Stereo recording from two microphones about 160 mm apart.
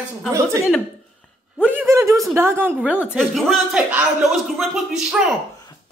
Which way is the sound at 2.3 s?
15° right (ahead or behind).